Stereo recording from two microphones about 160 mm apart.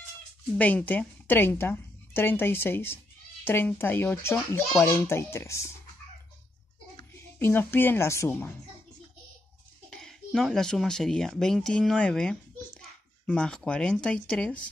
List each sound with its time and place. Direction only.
0.6 s a woman's voice: 10° left (ahead or behind)
7.0 s a woman's voice: 15° left (ahead or behind)
9.8 s speech: 5° left (ahead or behind)